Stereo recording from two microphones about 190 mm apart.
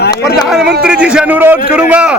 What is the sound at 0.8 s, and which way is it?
A man's voice, 5° right (ahead or behind).